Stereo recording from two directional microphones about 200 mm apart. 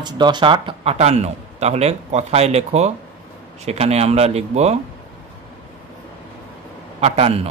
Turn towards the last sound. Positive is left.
turn(degrees=-30)  # may be behind; listen again after turning